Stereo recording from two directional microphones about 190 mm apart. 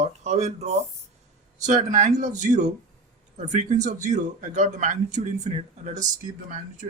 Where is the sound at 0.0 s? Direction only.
35° right (ahead or behind).